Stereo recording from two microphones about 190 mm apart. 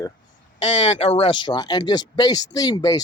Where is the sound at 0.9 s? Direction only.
35° left (ahead or behind).